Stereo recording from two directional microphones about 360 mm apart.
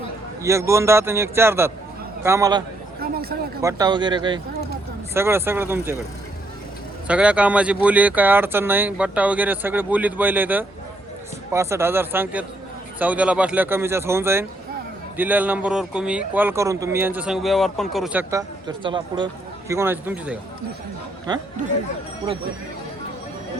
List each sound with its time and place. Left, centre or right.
0.4 s a man's voice: centre
3.0 s a sound: right
3.6 s a man's voice: centre
7.1 s a man's voice: centre